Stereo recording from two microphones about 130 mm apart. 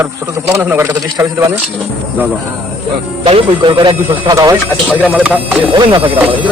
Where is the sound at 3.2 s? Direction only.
45° right (ahead or behind).